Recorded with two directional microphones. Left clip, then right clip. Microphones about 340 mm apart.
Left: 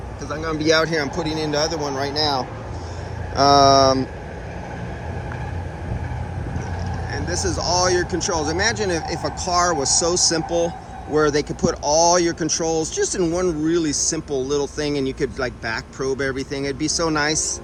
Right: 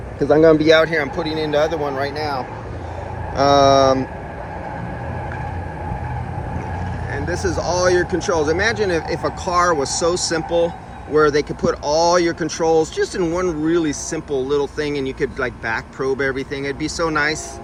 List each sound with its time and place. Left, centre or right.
0.2 s speech: right
0.5 s speech: centre
3.5 s speech: centre
7.1 s speech: centre